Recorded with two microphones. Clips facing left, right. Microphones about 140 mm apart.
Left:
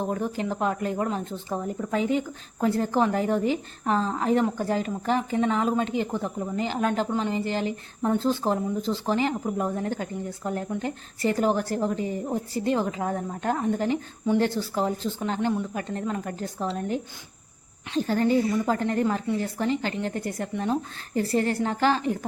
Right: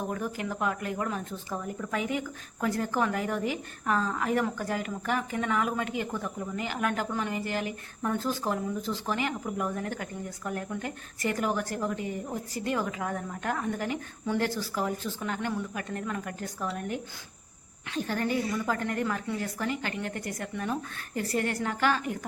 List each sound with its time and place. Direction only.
0.0 s speech: 30° left (ahead or behind)